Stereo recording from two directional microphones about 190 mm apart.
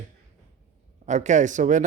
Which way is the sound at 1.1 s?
40° right (ahead or behind).